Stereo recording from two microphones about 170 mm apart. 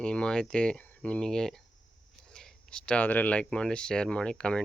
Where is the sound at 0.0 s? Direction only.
5° left (ahead or behind).